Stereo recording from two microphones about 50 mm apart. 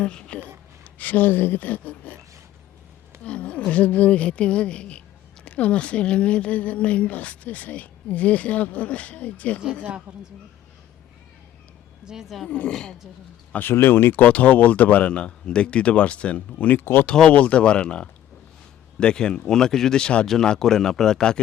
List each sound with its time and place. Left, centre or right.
0.0 s a woman's voice: centre
0.9 s speech: left
3.2 s a woman's voice: left
10.1 s speech: right
12.0 s speech: centre
12.5 s speech: left
12.7 s speech: centre
13.6 s speech: left
14.3 s a woman's voice: left
16.7 s speech: left
17.2 s a woman's voice: left